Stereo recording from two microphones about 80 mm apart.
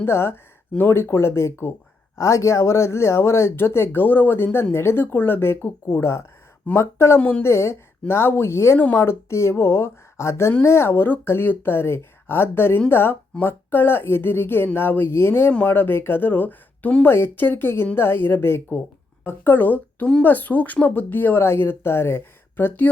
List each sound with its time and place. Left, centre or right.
0.0 s speech: left
7.2 s speech: centre
7.4 s speech: left